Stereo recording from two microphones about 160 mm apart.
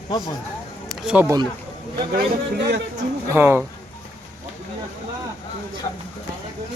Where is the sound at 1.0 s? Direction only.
10° right (ahead or behind).